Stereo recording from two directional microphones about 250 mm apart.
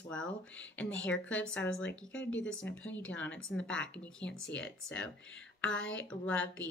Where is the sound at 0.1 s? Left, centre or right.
Centre.